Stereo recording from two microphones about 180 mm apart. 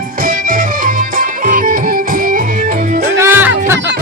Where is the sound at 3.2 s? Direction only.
10° right (ahead or behind).